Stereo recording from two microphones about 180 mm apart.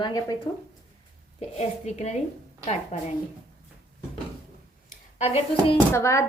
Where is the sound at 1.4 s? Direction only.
35° left (ahead or behind).